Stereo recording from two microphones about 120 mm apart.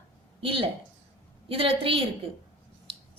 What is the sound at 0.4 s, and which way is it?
A woman's voice, 50° right (ahead or behind).